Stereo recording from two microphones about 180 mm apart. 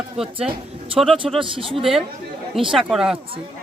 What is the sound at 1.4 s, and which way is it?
Speech, 30° right (ahead or behind).